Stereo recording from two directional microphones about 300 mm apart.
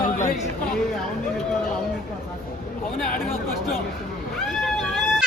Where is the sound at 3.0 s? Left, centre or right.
Left.